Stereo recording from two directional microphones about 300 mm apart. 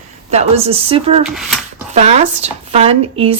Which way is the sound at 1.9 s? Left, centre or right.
Right.